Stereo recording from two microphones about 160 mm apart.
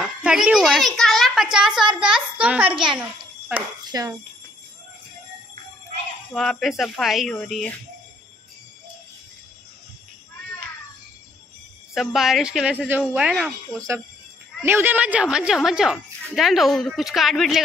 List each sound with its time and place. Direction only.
0.0 s a woman's voice: 5° right (ahead or behind)
3.9 s speech: 20° right (ahead or behind)
6.3 s a woman's voice: centre (ahead or behind)
11.9 s a woman's voice: centre (ahead or behind)
14.6 s a woman's voice: 15° right (ahead or behind)